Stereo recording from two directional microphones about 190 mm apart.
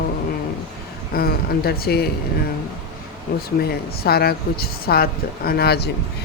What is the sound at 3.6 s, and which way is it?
Speech, 55° left (ahead or behind).